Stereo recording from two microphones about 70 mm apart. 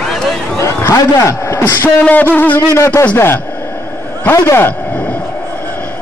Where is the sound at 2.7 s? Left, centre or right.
Left.